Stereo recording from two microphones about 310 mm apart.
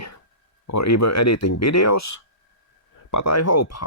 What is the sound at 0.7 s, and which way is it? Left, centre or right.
Speech, left.